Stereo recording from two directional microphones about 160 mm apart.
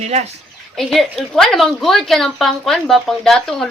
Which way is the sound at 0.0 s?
45° right (ahead or behind).